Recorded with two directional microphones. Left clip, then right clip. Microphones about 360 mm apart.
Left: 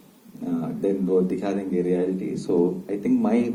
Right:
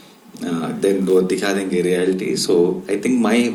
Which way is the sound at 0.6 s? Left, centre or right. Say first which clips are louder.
Right 8 dB; right.